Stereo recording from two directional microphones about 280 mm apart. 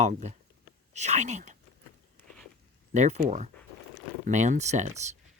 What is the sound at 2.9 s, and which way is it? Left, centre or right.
Speech, right.